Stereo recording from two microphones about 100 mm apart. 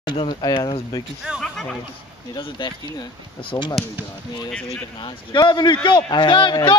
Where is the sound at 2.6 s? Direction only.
55° left (ahead or behind).